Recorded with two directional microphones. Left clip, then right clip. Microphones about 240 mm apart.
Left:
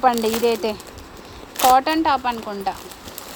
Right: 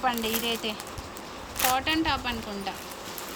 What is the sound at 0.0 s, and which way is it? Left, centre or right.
Speech, left.